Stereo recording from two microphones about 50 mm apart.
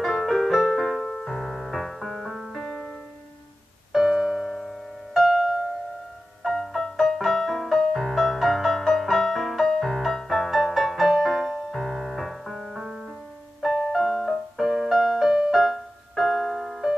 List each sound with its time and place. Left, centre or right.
0.0 s music: centre
2.5 s music: centre
3.9 s music: centre
12.5 s music: centre
15.0 s music: centre
15.2 s music: centre
15.5 s music: centre